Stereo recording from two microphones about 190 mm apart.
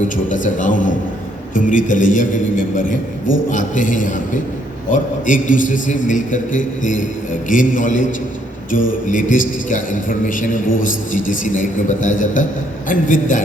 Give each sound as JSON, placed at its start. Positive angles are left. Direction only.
{"t": 0.3, "sound": "a man's voice", "side_deg": 40}